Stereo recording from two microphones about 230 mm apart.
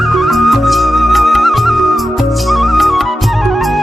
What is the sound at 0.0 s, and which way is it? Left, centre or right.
Music, centre.